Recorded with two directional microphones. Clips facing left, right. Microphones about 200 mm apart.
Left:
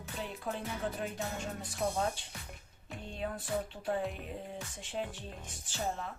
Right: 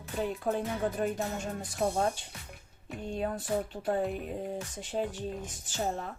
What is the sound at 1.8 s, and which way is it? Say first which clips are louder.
Speech: right 4 dB; 45° right (ahead or behind).